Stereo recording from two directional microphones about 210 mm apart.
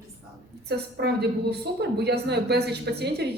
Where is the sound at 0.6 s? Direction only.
50° right (ahead or behind).